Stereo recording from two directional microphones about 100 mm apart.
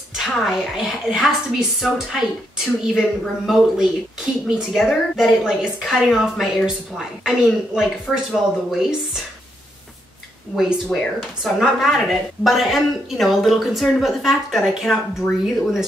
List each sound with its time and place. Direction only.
0.1 s a woman's voice: 5° right (ahead or behind)
10.5 s speech: centre (ahead or behind)